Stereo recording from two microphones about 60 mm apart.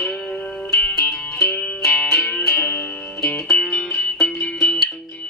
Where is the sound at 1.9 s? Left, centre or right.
Centre.